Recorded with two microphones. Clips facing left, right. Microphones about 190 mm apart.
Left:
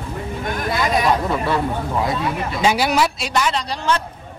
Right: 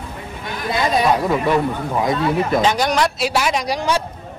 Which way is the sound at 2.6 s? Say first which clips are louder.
Left 4 dB; 10° left (ahead or behind).